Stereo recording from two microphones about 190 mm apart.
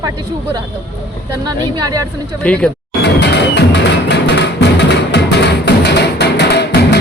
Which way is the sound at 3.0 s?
65° left (ahead or behind).